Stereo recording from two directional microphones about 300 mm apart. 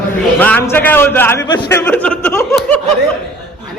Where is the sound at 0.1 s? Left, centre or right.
Centre.